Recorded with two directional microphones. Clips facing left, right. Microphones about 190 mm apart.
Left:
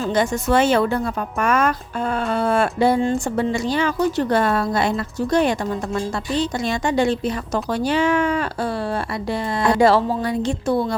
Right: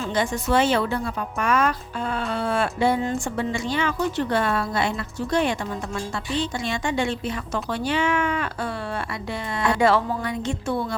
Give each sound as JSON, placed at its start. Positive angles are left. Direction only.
{"t": 0.1, "sound": "a woman's voice", "side_deg": 45}
{"t": 9.6, "sound": "a woman's voice", "side_deg": 35}